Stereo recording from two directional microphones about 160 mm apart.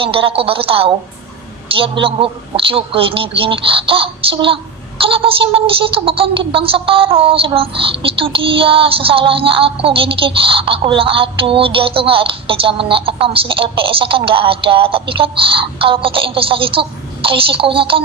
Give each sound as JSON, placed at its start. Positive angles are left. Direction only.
{"t": 0.0, "sound": "a woman's voice", "side_deg": -35}